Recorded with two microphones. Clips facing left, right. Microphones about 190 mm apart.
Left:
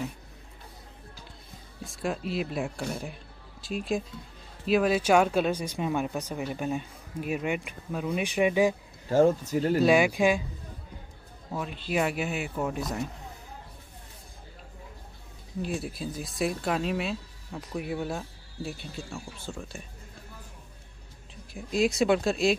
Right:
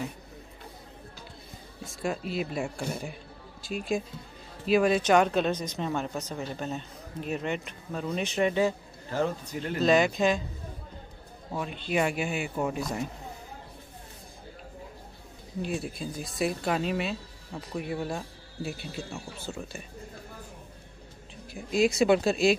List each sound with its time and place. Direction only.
1.9 s speech: centre (ahead or behind)
9.1 s speech: 45° left (ahead or behind)
9.8 s speech: 10° left (ahead or behind)
11.5 s speech: centre (ahead or behind)
15.6 s speech: centre (ahead or behind)
21.5 s speech: centre (ahead or behind)